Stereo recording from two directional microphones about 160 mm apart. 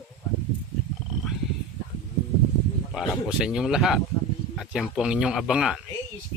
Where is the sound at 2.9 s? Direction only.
5° right (ahead or behind).